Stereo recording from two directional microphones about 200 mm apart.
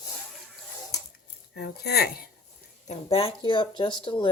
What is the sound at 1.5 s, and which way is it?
Speech, 55° left (ahead or behind).